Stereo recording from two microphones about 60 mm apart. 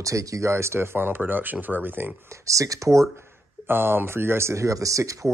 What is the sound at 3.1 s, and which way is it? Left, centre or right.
Speech, right.